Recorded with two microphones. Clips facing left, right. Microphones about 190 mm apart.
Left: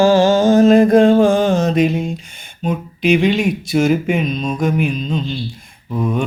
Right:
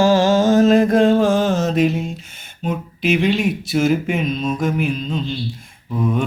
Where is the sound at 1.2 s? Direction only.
Centre (ahead or behind).